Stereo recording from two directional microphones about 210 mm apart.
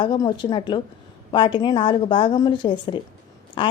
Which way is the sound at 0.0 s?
20° left (ahead or behind).